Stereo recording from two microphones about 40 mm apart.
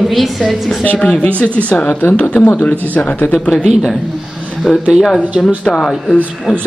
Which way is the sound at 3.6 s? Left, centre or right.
Centre.